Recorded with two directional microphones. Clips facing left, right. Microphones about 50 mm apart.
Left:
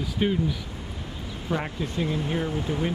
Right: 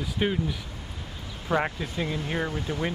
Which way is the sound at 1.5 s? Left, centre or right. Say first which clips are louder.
Right 2 dB; right.